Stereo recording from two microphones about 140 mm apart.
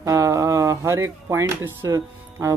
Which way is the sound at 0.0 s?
25° right (ahead or behind).